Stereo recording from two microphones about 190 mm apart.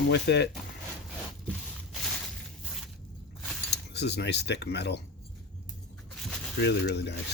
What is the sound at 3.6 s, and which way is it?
Speech, 60° left (ahead or behind).